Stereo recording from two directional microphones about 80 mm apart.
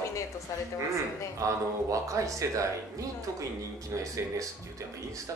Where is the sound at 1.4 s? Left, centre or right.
Right.